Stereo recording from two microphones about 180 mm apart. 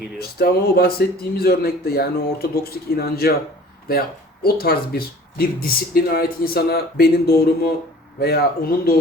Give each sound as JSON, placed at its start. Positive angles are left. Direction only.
{"t": 0.2, "sound": "speech", "side_deg": 60}